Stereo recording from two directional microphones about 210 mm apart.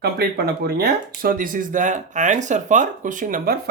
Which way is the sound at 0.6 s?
45° right (ahead or behind).